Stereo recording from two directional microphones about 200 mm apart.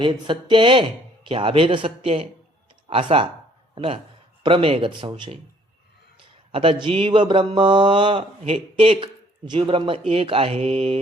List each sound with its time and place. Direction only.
0.0 s speech: 25° right (ahead or behind)
6.5 s speech: 25° right (ahead or behind)